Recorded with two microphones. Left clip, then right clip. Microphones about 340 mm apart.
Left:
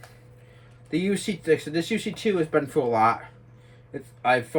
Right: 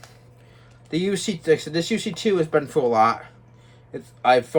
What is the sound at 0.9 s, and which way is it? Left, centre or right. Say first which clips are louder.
Speech: right 2 dB; centre.